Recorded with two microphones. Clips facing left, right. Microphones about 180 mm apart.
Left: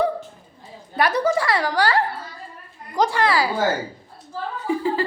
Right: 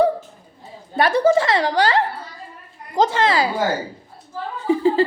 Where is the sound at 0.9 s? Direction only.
25° right (ahead or behind).